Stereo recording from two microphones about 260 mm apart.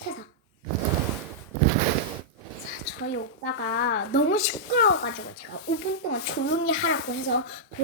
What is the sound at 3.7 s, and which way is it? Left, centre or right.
Speech, left.